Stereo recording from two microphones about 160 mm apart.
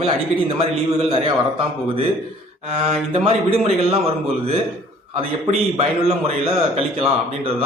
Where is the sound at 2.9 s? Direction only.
40° right (ahead or behind).